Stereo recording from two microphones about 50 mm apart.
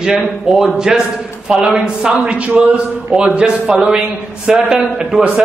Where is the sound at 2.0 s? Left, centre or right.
Right.